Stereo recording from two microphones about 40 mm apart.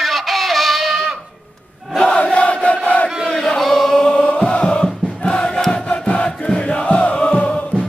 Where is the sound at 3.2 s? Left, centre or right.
Centre.